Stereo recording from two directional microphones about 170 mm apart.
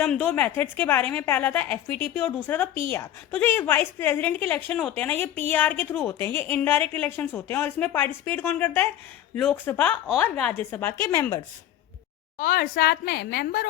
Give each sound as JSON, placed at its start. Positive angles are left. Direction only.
{"t": 0.0, "sound": "a woman's voice", "side_deg": 5}
{"t": 12.4, "sound": "a woman's voice", "side_deg": 60}